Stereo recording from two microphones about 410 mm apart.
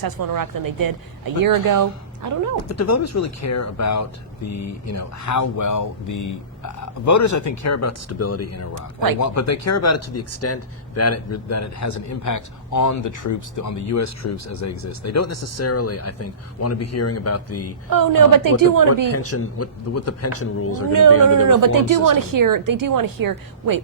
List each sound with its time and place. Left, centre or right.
0.0 s speech: right
2.6 s speech: left
17.8 s speech: right
19.1 s speech: left
21.5 s speech: right